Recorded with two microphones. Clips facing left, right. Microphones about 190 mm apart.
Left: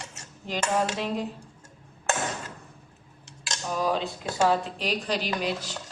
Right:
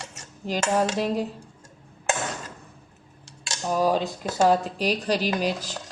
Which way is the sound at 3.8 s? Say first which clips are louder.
Right 4 dB; 40° right (ahead or behind).